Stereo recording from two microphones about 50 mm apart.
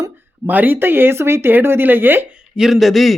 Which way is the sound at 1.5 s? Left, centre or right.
Right.